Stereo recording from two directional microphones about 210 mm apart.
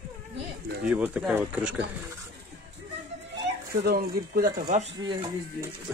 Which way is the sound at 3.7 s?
45° right (ahead or behind).